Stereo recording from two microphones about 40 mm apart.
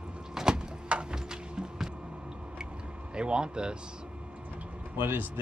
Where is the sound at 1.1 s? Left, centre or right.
Centre.